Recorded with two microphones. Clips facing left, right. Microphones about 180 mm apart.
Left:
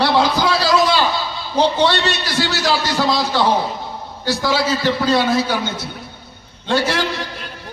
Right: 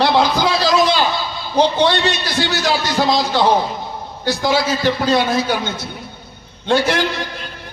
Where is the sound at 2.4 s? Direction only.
20° right (ahead or behind).